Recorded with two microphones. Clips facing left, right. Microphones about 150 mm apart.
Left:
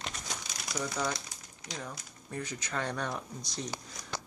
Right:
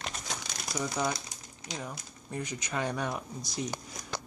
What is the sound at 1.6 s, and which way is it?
Speech, 15° right (ahead or behind).